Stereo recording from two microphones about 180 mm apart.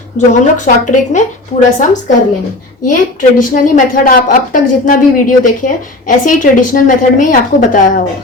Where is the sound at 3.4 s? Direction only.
45° left (ahead or behind).